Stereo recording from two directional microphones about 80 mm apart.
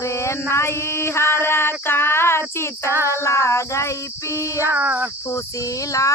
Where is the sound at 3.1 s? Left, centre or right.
Left.